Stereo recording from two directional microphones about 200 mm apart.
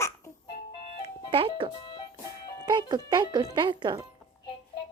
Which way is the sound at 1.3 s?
25° right (ahead or behind).